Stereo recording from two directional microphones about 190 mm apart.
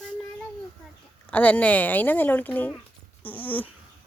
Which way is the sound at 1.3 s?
10° left (ahead or behind).